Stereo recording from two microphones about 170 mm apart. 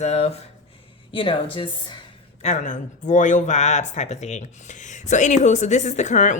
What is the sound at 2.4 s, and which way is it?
Speech, 45° left (ahead or behind).